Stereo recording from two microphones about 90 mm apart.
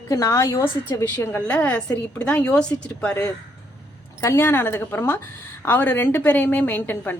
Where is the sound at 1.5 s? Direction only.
15° left (ahead or behind).